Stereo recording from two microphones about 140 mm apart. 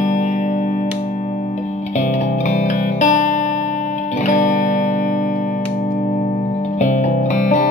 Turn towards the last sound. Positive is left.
turn(degrees=60)  # may be behind; listen again after turning